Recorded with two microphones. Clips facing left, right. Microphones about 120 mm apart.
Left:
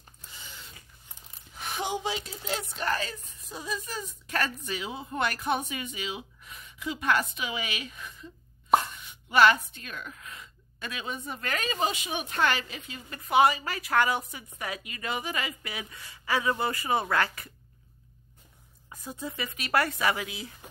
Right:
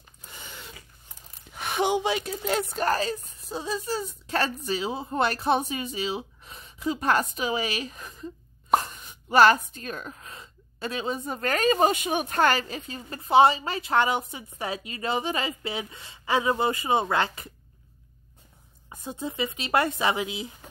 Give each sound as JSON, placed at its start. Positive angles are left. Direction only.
{"t": 0.2, "sound": "a sound", "side_deg": -55}
{"t": 1.5, "sound": "a woman's voice", "side_deg": -70}
{"t": 18.9, "sound": "speech", "side_deg": -25}